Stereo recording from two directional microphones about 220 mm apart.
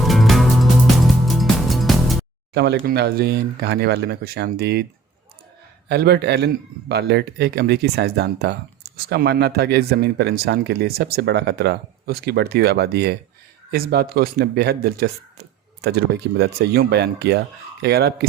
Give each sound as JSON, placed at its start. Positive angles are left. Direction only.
{"t": 0.0, "sound": "music", "side_deg": 0}
{"t": 2.5, "sound": "speech", "side_deg": -50}
{"t": 5.9, "sound": "speech", "side_deg": -50}